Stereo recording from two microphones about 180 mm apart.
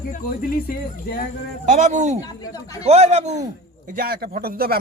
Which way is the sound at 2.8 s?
40° right (ahead or behind).